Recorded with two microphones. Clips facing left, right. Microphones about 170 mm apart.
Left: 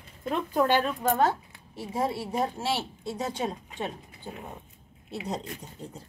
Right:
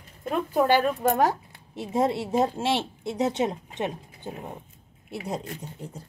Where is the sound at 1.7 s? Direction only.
20° right (ahead or behind).